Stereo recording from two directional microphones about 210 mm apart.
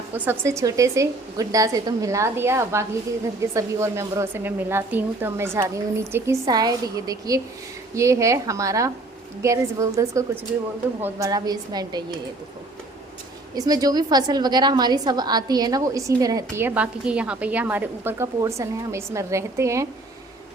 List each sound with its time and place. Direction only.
0.1 s a woman's voice: 10° right (ahead or behind)
13.6 s a woman's voice: 15° right (ahead or behind)